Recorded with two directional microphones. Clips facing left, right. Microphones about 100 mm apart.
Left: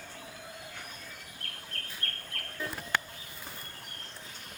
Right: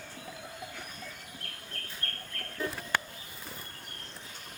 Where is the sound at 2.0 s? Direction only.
30° right (ahead or behind).